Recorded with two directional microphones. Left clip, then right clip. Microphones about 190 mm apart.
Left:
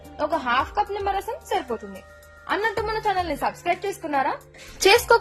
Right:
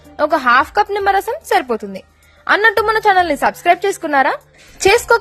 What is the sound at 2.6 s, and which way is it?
A woman's voice, 40° right (ahead or behind).